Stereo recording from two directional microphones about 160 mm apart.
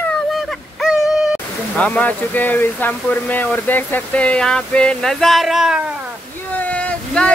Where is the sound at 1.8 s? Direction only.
10° left (ahead or behind).